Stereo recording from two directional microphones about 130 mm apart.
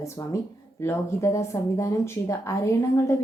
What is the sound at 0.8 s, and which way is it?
A woman's voice, 20° left (ahead or behind).